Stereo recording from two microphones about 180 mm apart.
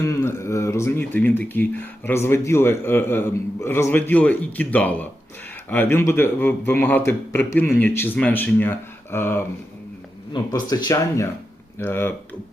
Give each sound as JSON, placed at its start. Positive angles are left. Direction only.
{"t": 0.0, "sound": "speech", "side_deg": 15}